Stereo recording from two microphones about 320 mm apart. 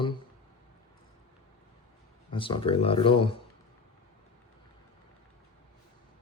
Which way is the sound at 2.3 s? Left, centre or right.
Centre.